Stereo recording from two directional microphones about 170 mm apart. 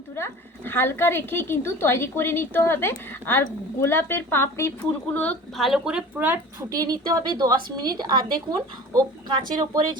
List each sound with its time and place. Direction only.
0.2 s speech: 10° left (ahead or behind)
5.5 s speech: centre (ahead or behind); by 8.4 s 25° right (ahead or behind)
9.6 s speech: 25° right (ahead or behind)